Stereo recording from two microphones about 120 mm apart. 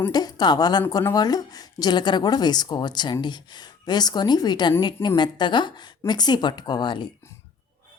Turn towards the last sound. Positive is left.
turn(degrees=40)  # may be behind; listen again after turning